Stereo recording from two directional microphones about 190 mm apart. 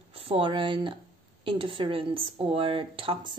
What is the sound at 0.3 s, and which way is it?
Speech, 25° right (ahead or behind).